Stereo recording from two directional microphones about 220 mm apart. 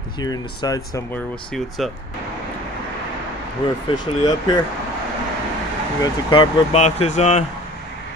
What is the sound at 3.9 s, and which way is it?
Speech, 20° left (ahead or behind).